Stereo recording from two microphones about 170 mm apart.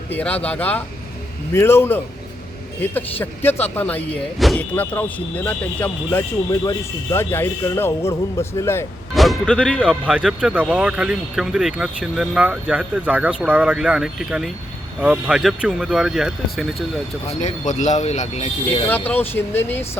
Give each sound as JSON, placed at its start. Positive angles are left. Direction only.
{"t": 0.1, "sound": "speech", "side_deg": 10}
{"t": 9.1, "sound": "speech", "side_deg": 0}
{"t": 9.8, "sound": "speech", "side_deg": -5}
{"t": 17.2, "sound": "speech", "side_deg": 45}
{"t": 18.9, "sound": "speech", "side_deg": 10}